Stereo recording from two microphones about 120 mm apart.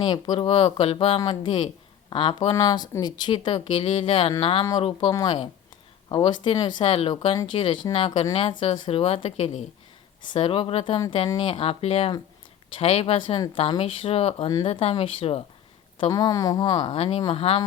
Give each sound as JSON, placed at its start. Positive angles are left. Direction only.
{"t": 0.0, "sound": "speech", "side_deg": 35}
{"t": 0.4, "sound": "speech", "side_deg": 50}
{"t": 1.2, "sound": "speech", "side_deg": 40}
{"t": 5.1, "sound": "speech", "side_deg": 35}
{"t": 14.4, "sound": "speech", "side_deg": 40}
{"t": 14.7, "sound": "speech", "side_deg": 55}
{"t": 16.0, "sound": "speech", "side_deg": 35}
{"t": 17.0, "sound": "speech", "side_deg": 55}